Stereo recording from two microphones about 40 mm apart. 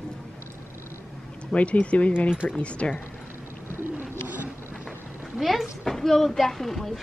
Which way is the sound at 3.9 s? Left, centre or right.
Right.